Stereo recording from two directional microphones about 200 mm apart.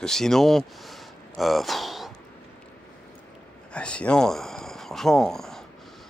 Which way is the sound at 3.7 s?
5° left (ahead or behind).